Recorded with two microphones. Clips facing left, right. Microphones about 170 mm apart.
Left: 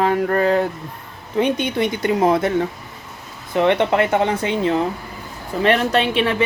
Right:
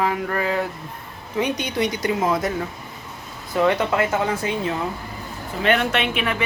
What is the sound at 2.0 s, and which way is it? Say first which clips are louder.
Speech: left 8 dB; 30° left (ahead or behind).